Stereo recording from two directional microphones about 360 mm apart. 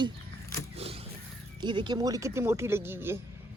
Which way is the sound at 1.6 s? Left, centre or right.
Centre.